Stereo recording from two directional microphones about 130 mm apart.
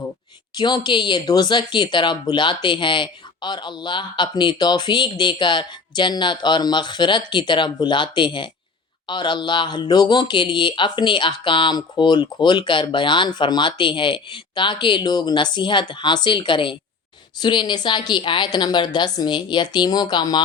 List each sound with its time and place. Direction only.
0.5 s speech: 35° left (ahead or behind)